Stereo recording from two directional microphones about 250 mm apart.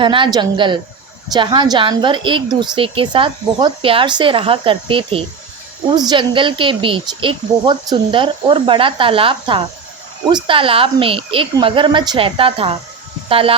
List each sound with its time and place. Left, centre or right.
0.0 s a woman's voice: centre